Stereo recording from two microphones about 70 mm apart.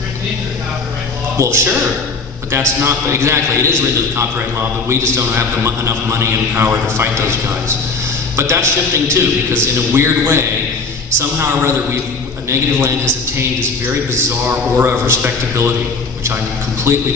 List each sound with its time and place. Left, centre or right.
1.4 s a man's voice: right
8.4 s a man's voice: right
14.4 s a man's voice: right
16.9 s a man's voice: right